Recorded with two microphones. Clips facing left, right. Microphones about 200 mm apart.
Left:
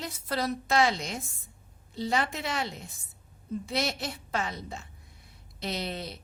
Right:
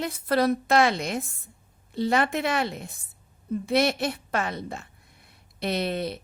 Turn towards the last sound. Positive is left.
turn(degrees=-60)  # may be behind; listen again after turning